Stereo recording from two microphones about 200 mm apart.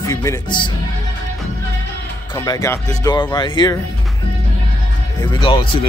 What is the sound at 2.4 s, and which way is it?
Speech, 15° left (ahead or behind).